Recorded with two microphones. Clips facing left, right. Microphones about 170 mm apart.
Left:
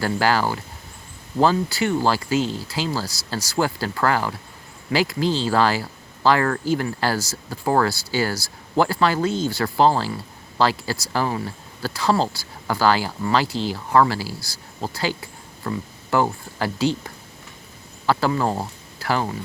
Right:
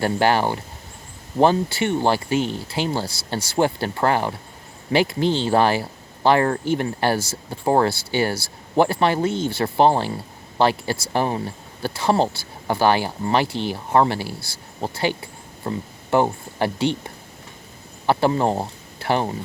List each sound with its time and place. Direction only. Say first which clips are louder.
0.0 s speech: right 2 dB; 25° right (ahead or behind)